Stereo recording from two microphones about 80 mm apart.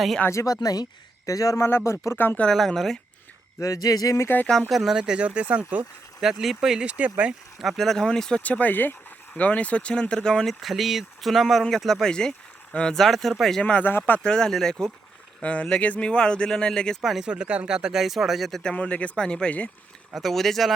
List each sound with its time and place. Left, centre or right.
0.3 s speech: left
1.6 s speech: left
2.4 s speech: centre
3.6 s speech: left
4.7 s speech: centre
6.1 s speech: centre
7.6 s speech: centre
8.4 s speech: centre
13.6 s speech: centre
17.0 s speech: centre
18.7 s speech: centre
20.1 s speech: centre